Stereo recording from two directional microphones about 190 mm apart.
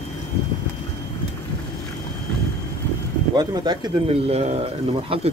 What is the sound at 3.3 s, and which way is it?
Speech, 20° right (ahead or behind).